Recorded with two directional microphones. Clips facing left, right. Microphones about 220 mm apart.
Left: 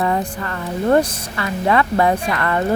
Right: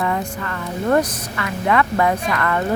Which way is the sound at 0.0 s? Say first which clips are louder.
Left 2 dB; 35° left (ahead or behind).